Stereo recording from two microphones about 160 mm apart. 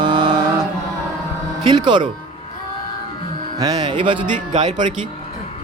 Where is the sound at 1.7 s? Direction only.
30° right (ahead or behind).